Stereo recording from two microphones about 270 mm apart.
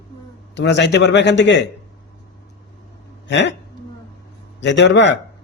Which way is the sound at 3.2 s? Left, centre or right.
Left.